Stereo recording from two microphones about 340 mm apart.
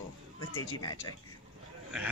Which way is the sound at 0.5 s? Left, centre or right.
Left.